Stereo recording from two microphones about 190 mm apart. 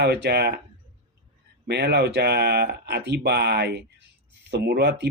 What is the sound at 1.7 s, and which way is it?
Speech, 60° right (ahead or behind).